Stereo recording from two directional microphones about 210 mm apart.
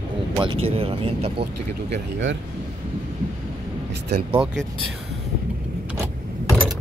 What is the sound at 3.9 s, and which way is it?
Speech, 50° right (ahead or behind).